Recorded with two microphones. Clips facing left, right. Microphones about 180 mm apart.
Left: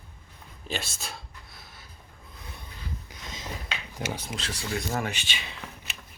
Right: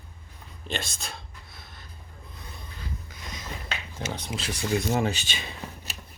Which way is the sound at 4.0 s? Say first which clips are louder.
Left 1 dB; 10° left (ahead or behind).